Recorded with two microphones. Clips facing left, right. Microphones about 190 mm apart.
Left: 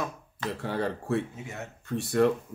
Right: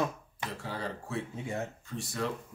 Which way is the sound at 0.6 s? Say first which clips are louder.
Left 9 dB; 60° left (ahead or behind).